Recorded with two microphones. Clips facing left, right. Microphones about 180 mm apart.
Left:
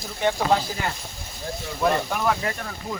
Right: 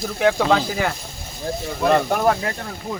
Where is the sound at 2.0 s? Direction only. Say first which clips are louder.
Right 6 dB; 45° right (ahead or behind).